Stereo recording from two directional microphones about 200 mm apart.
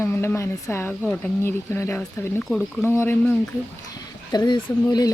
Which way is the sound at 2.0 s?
Centre (ahead or behind).